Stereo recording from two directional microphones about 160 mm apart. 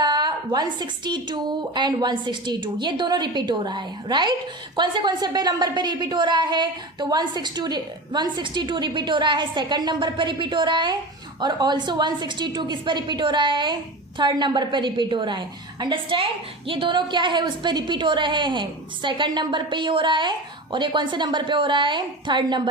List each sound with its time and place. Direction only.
0.0 s a woman's voice: 25° right (ahead or behind)